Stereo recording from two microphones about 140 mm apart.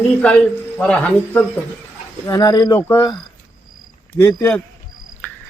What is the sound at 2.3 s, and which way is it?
Speech, 30° left (ahead or behind).